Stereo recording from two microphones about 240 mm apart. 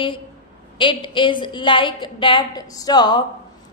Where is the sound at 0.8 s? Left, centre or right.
Centre.